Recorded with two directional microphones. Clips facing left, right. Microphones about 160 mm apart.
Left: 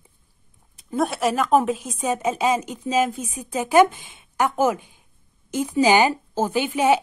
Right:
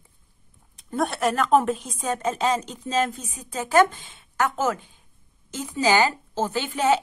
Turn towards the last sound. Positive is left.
turn(degrees=15)  # may be behind; listen again after turning